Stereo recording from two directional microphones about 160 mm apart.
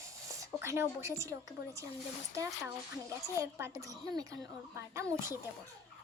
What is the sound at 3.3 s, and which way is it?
A child's voice, 20° right (ahead or behind).